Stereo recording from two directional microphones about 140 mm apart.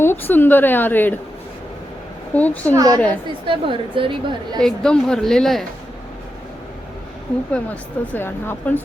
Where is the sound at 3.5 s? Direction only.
35° right (ahead or behind).